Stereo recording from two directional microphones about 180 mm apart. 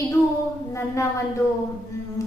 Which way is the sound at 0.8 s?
15° left (ahead or behind).